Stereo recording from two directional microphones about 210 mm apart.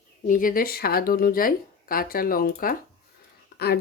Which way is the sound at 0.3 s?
40° left (ahead or behind).